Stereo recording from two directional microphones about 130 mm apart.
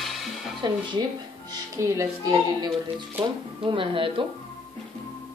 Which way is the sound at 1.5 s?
25° right (ahead or behind).